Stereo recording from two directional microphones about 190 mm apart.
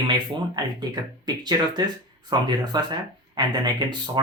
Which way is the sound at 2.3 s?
20° right (ahead or behind).